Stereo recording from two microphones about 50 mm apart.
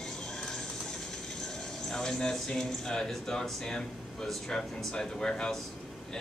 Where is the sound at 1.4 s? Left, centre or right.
Centre.